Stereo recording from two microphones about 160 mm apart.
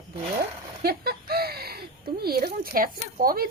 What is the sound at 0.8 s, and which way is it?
Speech, 70° right (ahead or behind).